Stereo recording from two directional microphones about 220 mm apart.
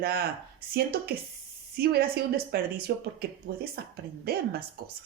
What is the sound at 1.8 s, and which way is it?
A woman's voice, 45° right (ahead or behind).